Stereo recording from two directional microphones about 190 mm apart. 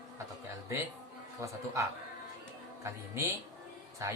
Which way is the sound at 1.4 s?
15° right (ahead or behind).